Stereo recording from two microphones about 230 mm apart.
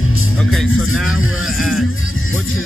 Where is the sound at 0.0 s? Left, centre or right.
Left.